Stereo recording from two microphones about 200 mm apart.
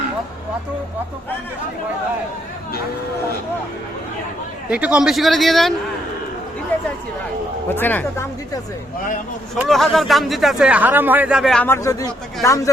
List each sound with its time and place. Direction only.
4.7 s speech: 5° right (ahead or behind)
7.7 s speech: 10° left (ahead or behind)
9.6 s speech: centre (ahead or behind)